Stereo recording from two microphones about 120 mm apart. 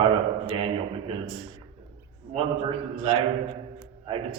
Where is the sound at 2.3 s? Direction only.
55° right (ahead or behind).